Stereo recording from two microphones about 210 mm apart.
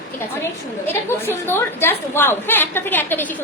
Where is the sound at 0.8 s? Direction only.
10° left (ahead or behind).